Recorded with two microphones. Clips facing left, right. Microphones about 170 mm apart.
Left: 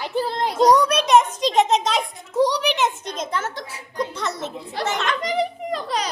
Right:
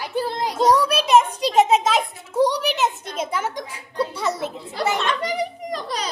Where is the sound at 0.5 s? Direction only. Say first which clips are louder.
Left 2 dB; centre (ahead or behind).